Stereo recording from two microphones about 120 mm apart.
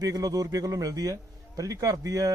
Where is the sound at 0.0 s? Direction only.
30° right (ahead or behind).